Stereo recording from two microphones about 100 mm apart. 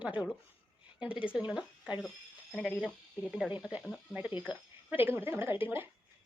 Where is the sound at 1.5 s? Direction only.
10° right (ahead or behind).